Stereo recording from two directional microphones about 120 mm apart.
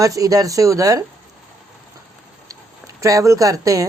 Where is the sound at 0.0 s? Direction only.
30° right (ahead or behind).